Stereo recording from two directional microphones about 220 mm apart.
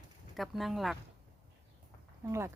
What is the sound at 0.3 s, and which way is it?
Speech, centre (ahead or behind).